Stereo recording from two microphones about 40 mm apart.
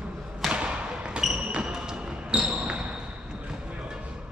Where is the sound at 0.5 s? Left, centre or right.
Right.